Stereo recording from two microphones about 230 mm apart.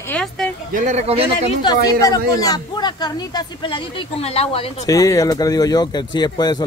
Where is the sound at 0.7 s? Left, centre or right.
Right.